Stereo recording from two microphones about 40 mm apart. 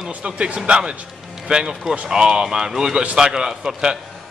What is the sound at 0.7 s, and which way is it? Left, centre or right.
A man's voice, right.